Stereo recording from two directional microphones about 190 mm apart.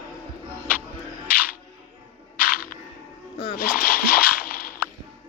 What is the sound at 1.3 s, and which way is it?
Music, 10° right (ahead or behind).